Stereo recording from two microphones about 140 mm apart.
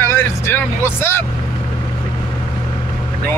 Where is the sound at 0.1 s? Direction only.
15° left (ahead or behind).